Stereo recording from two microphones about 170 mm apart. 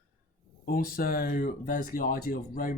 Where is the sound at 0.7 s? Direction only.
60° left (ahead or behind).